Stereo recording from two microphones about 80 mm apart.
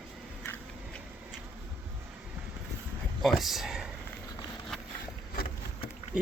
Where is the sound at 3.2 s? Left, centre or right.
Centre.